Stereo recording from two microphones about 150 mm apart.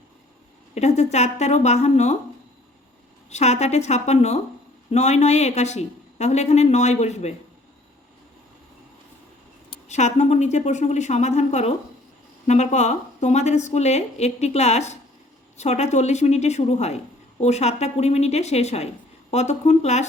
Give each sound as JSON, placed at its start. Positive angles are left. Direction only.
{"t": 0.7, "sound": "a woman's voice", "side_deg": 50}
{"t": 3.2, "sound": "a woman's voice", "side_deg": 50}
{"t": 9.9, "sound": "a woman's voice", "side_deg": 50}